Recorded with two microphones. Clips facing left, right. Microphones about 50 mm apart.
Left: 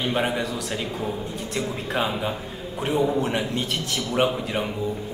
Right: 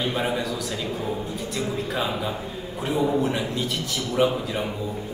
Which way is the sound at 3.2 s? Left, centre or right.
Left.